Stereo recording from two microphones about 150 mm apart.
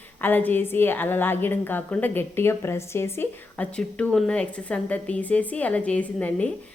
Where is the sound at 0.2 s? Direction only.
10° left (ahead or behind).